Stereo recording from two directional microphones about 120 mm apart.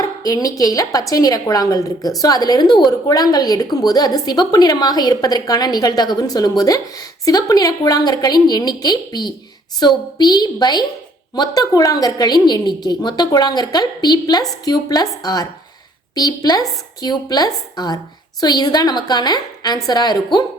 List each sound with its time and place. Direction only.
0.0 s a woman's voice: 30° left (ahead or behind)